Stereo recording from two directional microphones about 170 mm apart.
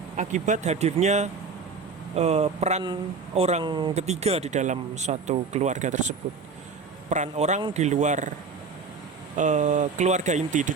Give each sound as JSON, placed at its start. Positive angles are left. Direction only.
{"t": 0.2, "sound": "speech", "side_deg": -45}
{"t": 2.8, "sound": "speech", "side_deg": -25}
{"t": 3.9, "sound": "speech", "side_deg": -40}
{"t": 9.4, "sound": "speech", "side_deg": -45}